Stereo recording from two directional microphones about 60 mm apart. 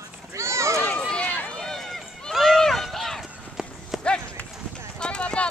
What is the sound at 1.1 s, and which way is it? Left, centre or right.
Run, left.